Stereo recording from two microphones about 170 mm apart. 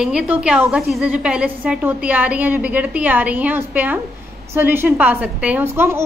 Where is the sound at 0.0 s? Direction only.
5° right (ahead or behind).